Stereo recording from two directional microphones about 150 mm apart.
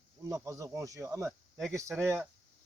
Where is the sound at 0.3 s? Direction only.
20° right (ahead or behind).